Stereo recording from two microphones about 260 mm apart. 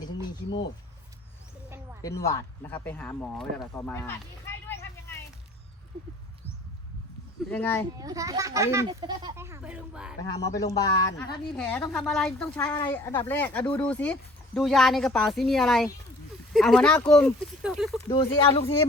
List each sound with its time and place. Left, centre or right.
2.0 s speech: centre
7.5 s speech: centre
7.9 s a child's voice: centre
10.4 s speech: centre
18.1 s speech: centre